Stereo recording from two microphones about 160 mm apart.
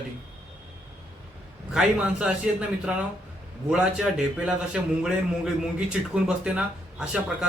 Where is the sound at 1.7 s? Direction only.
5° right (ahead or behind).